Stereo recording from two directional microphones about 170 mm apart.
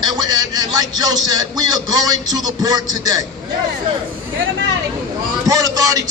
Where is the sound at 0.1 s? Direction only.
25° right (ahead or behind).